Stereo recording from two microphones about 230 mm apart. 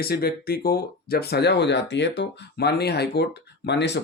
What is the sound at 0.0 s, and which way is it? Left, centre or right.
Speech, left.